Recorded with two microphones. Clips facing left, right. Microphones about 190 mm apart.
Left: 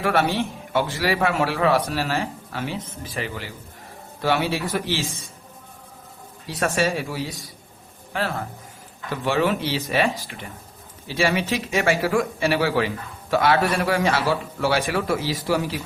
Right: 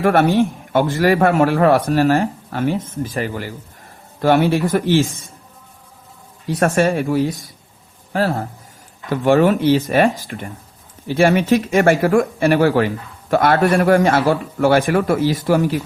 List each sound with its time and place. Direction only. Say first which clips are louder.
0.0 s speech: right 7 dB; 50° right (ahead or behind)
6.6 s speech: right 6 dB; 50° right (ahead or behind)
8.1 s a man's voice: right 7 dB; 40° right (ahead or behind)
9.0 s speech: right 8 dB; 50° right (ahead or behind)